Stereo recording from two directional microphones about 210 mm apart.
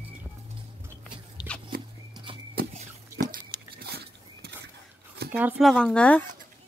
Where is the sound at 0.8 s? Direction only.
10° right (ahead or behind).